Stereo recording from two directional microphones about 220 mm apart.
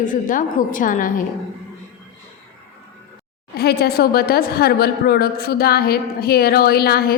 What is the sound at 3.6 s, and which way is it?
A woman's voice, 45° left (ahead or behind).